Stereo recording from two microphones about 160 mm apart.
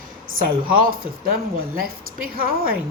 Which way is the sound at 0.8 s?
65° right (ahead or behind).